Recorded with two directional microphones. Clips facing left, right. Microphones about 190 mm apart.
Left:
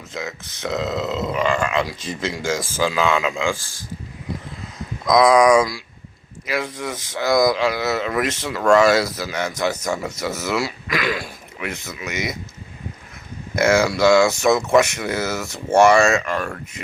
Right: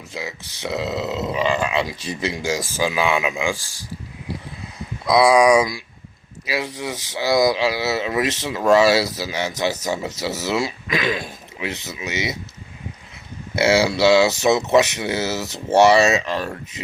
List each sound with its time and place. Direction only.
0.1 s speech: 10° right (ahead or behind)
5.0 s speech: 10° right (ahead or behind)
13.8 s speech: 20° right (ahead or behind)